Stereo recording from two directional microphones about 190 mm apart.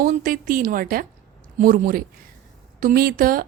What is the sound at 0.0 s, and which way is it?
Speech, 45° right (ahead or behind).